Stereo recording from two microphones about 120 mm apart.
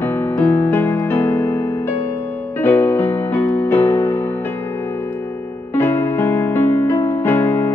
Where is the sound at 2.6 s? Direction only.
15° left (ahead or behind).